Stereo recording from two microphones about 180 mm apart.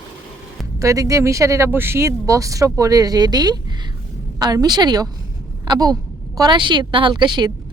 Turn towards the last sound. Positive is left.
turn(degrees=-25)  # may be behind; listen again after turning